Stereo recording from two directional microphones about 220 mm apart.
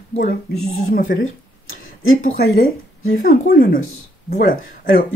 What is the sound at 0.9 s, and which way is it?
Speech, 40° left (ahead or behind).